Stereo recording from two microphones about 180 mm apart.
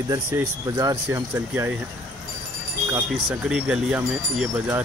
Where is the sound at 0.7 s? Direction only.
20° right (ahead or behind).